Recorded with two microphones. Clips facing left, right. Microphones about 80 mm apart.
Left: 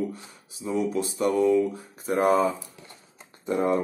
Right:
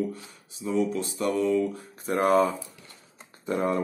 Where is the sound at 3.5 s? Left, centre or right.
Left.